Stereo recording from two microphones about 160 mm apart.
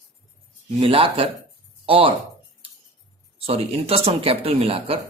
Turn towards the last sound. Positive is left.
turn(degrees=-35)  # may be behind; listen again after turning